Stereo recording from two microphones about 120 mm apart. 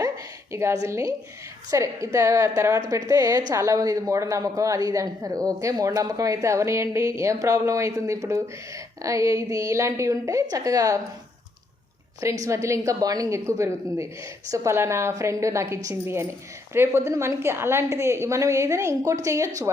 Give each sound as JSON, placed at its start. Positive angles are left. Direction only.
{"t": 0.5, "sound": "speech", "side_deg": -25}
{"t": 12.2, "sound": "speech", "side_deg": -25}